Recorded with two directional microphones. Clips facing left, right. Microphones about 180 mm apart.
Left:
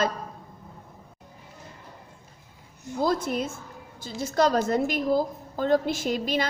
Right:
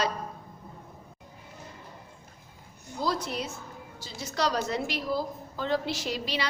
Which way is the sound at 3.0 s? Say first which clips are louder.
Left 5 dB; 50° left (ahead or behind).